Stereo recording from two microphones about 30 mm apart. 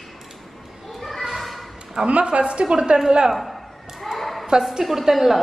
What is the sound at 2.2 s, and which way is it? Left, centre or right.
Speech, right.